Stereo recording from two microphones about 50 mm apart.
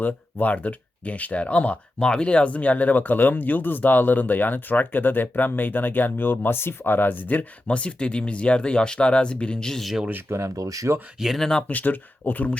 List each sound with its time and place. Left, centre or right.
0.0 s speech: left
2.0 s speech: centre; by 7.8 s left
7.8 s speech: left
9.8 s speech: centre
10.2 s speech: right
11.3 s speech: centre
11.7 s speech: left